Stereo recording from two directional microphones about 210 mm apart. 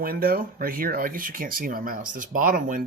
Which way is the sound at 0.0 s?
45° right (ahead or behind).